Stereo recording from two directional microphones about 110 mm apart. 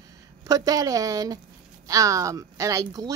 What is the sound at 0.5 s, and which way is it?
A woman's voice, 35° right (ahead or behind).